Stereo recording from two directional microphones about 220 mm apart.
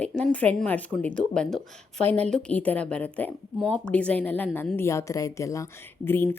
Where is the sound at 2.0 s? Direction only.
30° right (ahead or behind).